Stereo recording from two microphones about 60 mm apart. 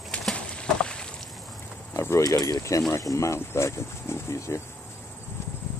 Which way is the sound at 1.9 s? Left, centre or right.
Left.